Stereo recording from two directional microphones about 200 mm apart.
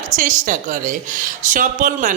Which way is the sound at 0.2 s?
40° right (ahead or behind).